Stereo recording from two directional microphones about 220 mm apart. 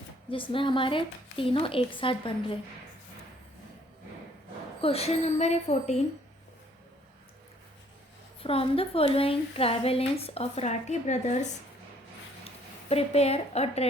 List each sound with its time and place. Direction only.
0.3 s speech: 25° left (ahead or behind)
4.8 s speech: 25° left (ahead or behind)
8.4 s speech: 25° left (ahead or behind)
12.5 s speech: 25° left (ahead or behind)